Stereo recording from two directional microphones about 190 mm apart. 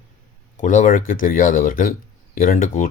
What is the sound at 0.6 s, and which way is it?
Speech, 40° left (ahead or behind).